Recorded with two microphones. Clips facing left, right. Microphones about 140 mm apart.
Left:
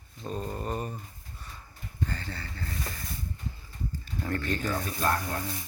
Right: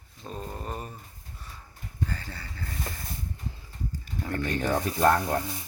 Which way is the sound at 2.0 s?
10° right (ahead or behind).